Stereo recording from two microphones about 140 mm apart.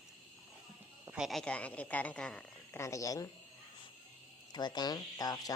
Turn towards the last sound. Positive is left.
turn(degrees=25)  # may be behind; listen again after turning